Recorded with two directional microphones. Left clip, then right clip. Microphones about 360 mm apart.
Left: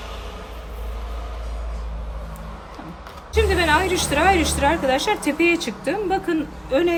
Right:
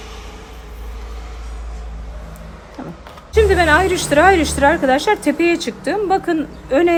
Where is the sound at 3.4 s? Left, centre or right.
Right.